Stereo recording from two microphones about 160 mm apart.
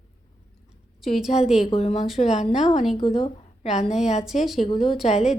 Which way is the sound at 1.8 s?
45° left (ahead or behind).